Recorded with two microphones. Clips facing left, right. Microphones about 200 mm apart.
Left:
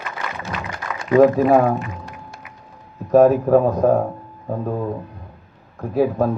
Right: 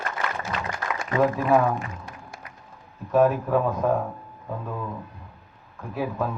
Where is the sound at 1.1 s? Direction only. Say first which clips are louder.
Left 8 dB; 40° left (ahead or behind).